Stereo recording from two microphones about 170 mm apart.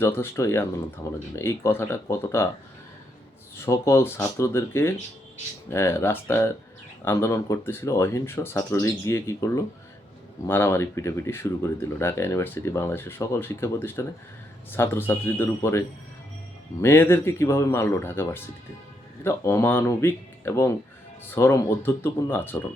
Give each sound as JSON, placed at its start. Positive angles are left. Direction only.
{"t": 0.0, "sound": "speech", "side_deg": 15}
{"t": 3.6, "sound": "speech", "side_deg": 15}
{"t": 16.8, "sound": "speech", "side_deg": 15}